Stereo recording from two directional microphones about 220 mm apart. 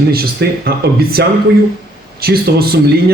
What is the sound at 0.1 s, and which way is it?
Speech, 45° right (ahead or behind).